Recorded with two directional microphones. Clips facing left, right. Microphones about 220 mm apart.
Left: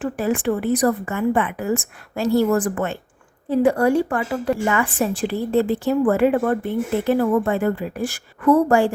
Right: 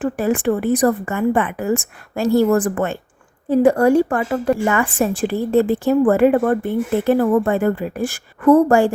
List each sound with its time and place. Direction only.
0.0 s a woman's voice: 50° right (ahead or behind)